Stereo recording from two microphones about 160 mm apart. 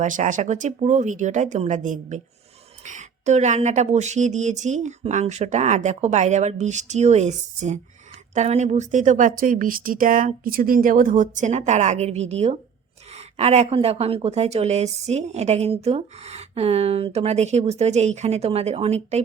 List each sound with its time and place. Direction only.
0.0 s speech: 50° right (ahead or behind)